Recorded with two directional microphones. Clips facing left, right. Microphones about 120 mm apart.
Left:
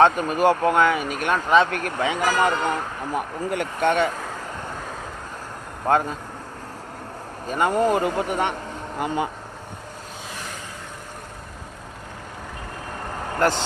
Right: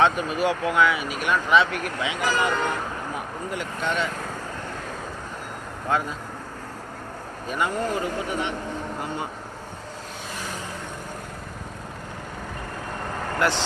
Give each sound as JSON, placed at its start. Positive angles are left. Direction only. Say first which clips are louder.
{"t": 0.0, "sound": "speech", "louder": "left 4 dB", "side_deg": 45}
{"t": 3.2, "sound": "speech", "louder": "left 5 dB", "side_deg": 60}
{"t": 5.9, "sound": "speech", "louder": "left 5 dB", "side_deg": 55}
{"t": 7.4, "sound": "speech", "louder": "left 4 dB", "side_deg": 40}
{"t": 7.7, "sound": "speech", "louder": "left 6 dB", "side_deg": 55}
{"t": 9.0, "sound": "speech", "louder": "left 6 dB", "side_deg": 90}
{"t": 13.4, "sound": "speech", "louder": "left 3 dB", "side_deg": 45}